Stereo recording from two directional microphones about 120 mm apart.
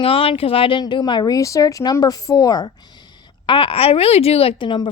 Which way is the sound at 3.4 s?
45° left (ahead or behind).